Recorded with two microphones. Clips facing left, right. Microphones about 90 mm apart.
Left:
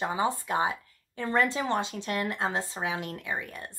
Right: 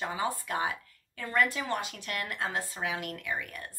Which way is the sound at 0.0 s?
25° left (ahead or behind).